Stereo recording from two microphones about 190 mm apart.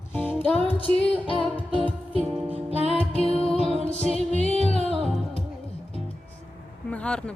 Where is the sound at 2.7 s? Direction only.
35° right (ahead or behind).